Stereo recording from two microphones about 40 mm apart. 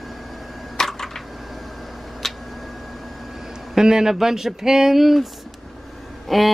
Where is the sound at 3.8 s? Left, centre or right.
Centre.